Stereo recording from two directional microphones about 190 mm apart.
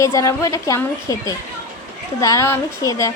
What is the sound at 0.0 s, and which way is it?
A woman's voice, 15° left (ahead or behind).